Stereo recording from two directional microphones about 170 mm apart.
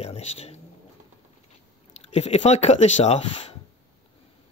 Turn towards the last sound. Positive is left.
turn(degrees=40)  # may be behind; listen again after turning